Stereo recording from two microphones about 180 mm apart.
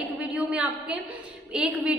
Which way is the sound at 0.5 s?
5° right (ahead or behind).